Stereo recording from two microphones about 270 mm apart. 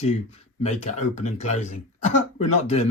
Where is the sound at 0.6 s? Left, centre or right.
Left.